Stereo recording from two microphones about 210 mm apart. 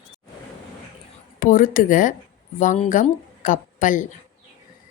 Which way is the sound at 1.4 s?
40° left (ahead or behind).